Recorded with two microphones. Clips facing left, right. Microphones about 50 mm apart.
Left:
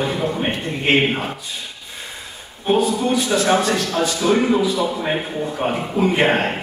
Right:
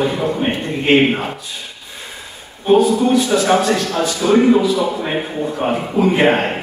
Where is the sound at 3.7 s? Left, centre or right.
Right; by 6.5 s centre.